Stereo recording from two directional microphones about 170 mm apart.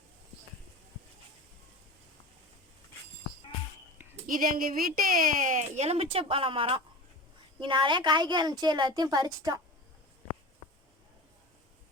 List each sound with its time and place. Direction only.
4.3 s a woman's voice: 55° right (ahead or behind); by 9.6 s 20° right (ahead or behind)